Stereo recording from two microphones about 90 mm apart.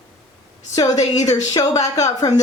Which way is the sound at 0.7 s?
40° left (ahead or behind).